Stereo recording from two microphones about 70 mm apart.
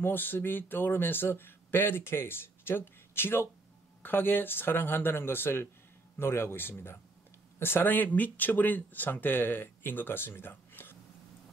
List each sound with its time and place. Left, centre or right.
0.0 s speech: left